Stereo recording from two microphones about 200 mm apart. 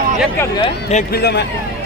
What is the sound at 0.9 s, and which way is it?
Speech, 50° left (ahead or behind).